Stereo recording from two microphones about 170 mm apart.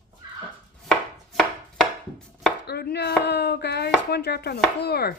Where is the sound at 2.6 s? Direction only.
70° left (ahead or behind).